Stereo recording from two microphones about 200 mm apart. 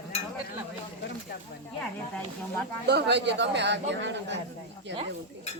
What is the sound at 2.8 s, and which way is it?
Speech, 55° right (ahead or behind).